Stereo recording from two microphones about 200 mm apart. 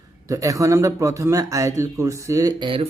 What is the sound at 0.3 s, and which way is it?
Speech, 15° right (ahead or behind).